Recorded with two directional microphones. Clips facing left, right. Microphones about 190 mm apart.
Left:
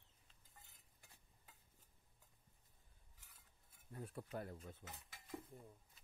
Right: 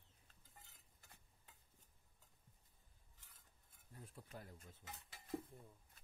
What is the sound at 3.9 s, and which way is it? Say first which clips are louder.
Speech: left 8 dB; 65° left (ahead or behind).